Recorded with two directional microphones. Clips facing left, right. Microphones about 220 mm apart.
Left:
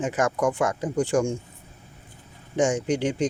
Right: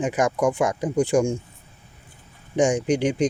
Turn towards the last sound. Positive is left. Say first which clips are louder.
# right 3 dB
turn(degrees=-15)  # may be behind; listen again after turning